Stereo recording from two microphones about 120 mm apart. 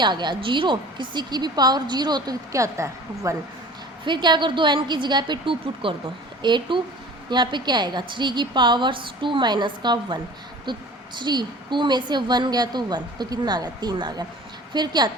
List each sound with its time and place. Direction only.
0.0 s a woman's voice: 40° right (ahead or behind)
4.0 s a woman's voice: 40° right (ahead or behind)